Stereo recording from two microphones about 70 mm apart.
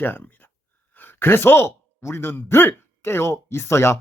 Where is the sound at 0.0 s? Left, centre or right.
Left.